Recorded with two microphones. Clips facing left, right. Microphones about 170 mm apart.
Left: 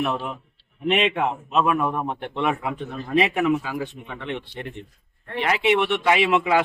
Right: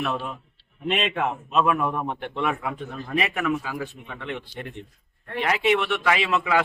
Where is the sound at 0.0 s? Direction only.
15° left (ahead or behind).